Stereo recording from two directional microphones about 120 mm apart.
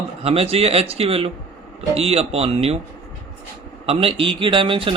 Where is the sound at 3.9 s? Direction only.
50° right (ahead or behind).